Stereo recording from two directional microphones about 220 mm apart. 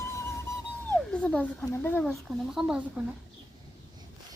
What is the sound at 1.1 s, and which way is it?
Speech, 5° left (ahead or behind).